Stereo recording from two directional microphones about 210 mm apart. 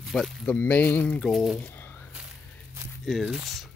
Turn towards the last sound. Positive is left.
turn(degrees=0)  # may be behind; listen again after turning